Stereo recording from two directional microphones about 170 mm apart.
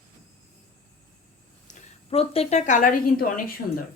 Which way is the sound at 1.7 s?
35° left (ahead or behind).